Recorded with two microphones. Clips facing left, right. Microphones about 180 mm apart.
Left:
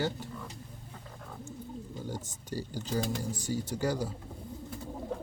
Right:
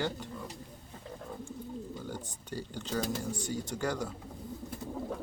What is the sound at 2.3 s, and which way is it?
Speech, 40° left (ahead or behind).